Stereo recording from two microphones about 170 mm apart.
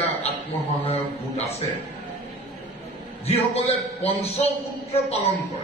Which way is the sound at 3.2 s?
35° left (ahead or behind).